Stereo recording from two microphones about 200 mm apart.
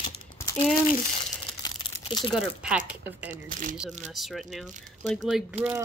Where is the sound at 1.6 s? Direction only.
25° left (ahead or behind).